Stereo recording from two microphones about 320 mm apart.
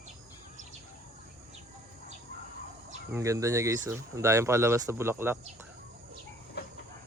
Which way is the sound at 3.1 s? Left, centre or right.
Centre.